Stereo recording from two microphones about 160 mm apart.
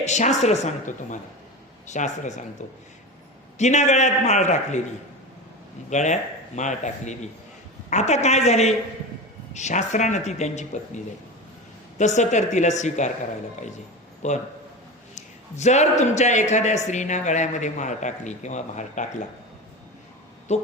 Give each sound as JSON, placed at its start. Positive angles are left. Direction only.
{"t": 0.0, "sound": "a man's voice", "side_deg": 45}
{"t": 5.9, "sound": "a man's voice", "side_deg": 50}
{"t": 14.2, "sound": "a man's voice", "side_deg": 45}
{"t": 20.5, "sound": "a man's voice", "side_deg": 45}